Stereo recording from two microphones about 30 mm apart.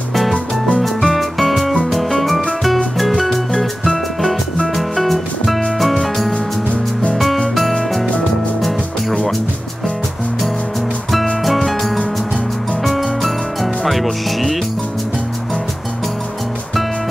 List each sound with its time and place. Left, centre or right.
0.1 s music: centre
6.7 s music: left
7.2 s music: centre
11.4 s music: centre